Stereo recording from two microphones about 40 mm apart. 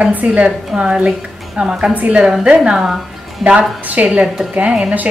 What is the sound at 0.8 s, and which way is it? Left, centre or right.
A woman's voice, right.